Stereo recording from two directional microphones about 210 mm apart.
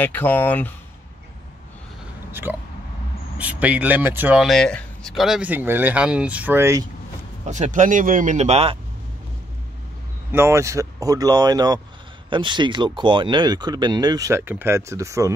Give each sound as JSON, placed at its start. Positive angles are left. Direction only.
{"t": 0.0, "sound": "speech", "side_deg": 10}
{"t": 2.5, "sound": "speech", "side_deg": 10}
{"t": 3.3, "sound": "speech", "side_deg": -5}
{"t": 7.4, "sound": "speech", "side_deg": -35}
{"t": 10.3, "sound": "speech", "side_deg": -10}